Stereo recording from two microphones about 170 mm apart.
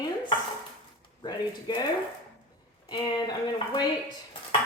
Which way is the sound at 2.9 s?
25° left (ahead or behind).